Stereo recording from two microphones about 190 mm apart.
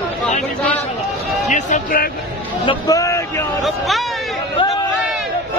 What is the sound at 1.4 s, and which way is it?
Speech, 40° left (ahead or behind).